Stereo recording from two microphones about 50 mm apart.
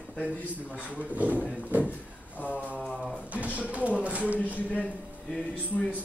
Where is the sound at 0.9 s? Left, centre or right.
Right.